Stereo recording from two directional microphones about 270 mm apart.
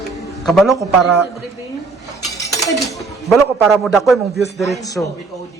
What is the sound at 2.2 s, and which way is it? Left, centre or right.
Dishes, centre.